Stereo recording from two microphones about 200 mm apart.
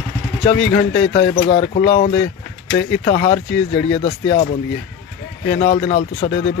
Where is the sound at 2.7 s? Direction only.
65° left (ahead or behind).